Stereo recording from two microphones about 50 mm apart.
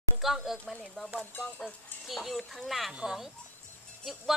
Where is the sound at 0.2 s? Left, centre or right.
Centre.